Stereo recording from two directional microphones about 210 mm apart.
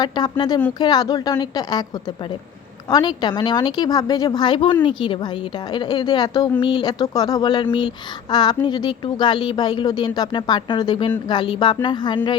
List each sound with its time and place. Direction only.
0.0 s speech: 20° left (ahead or behind)
2.9 s speech: 20° left (ahead or behind)